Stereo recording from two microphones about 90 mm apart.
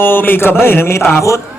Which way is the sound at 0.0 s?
20° left (ahead or behind).